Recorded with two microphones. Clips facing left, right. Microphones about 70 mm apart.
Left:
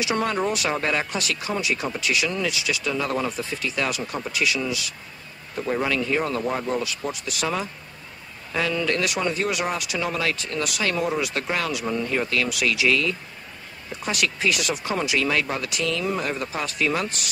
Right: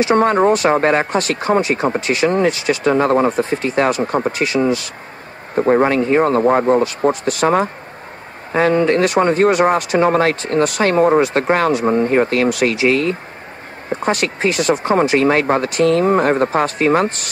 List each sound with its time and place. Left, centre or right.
0.0 s speech: right